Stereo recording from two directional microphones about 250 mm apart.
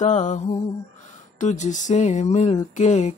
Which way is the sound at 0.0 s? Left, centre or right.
Left.